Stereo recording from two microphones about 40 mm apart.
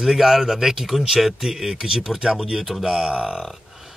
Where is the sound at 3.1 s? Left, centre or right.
Right.